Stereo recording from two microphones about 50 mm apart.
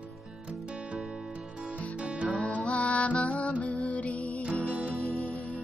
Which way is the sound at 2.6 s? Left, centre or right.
Left.